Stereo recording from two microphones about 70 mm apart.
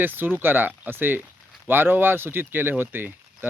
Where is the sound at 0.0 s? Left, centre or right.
Right.